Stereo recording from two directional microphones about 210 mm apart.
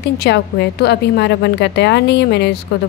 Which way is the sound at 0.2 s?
50° left (ahead or behind).